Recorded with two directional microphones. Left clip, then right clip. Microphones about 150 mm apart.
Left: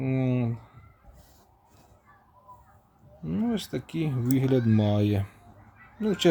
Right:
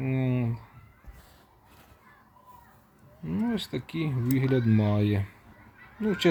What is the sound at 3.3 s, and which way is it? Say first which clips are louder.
Speech: left 1 dB; 20° left (ahead or behind).